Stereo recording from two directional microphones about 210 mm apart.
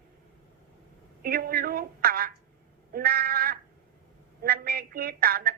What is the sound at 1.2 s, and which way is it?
Speech, 45° right (ahead or behind).